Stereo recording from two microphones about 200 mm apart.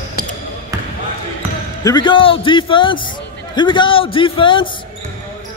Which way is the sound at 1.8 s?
20° left (ahead or behind).